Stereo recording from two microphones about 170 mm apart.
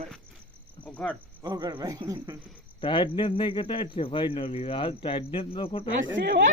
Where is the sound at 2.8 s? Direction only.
30° left (ahead or behind).